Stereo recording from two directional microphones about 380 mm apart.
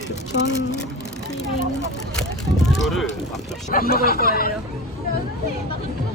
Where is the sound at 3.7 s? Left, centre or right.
Left.